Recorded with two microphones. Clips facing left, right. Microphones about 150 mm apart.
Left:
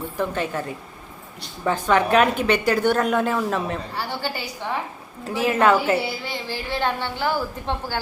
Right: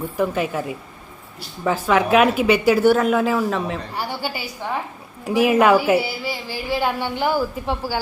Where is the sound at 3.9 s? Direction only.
10° right (ahead or behind).